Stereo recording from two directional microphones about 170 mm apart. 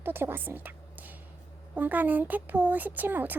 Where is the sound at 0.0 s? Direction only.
15° right (ahead or behind).